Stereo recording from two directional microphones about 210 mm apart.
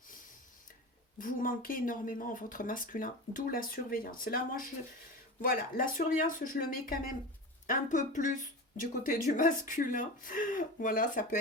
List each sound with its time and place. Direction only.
1.2 s speech: 40° left (ahead or behind)